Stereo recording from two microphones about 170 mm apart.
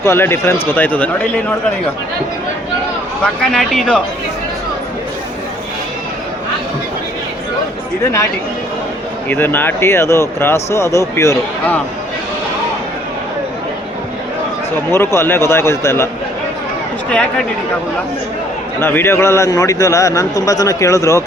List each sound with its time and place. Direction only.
0.0 s speech: 15° left (ahead or behind)
3.4 s speech: 5° left (ahead or behind)
9.3 s speech: 10° left (ahead or behind)
14.8 s speech: 15° left (ahead or behind)
17.1 s speech: 5° left (ahead or behind)
18.8 s a man's voice: 15° left (ahead or behind)